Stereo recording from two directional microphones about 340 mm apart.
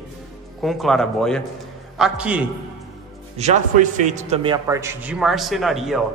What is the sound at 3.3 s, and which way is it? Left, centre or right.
A man's voice, centre.